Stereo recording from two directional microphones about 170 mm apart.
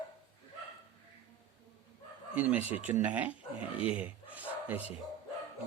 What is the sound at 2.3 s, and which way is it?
Speech, 10° right (ahead or behind).